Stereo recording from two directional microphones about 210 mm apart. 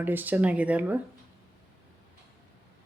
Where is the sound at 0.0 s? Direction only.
10° right (ahead or behind).